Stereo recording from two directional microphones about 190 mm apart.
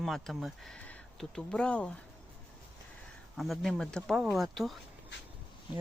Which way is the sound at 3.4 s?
Centre (ahead or behind).